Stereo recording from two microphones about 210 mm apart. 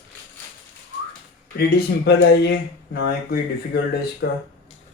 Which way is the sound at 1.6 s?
50° left (ahead or behind).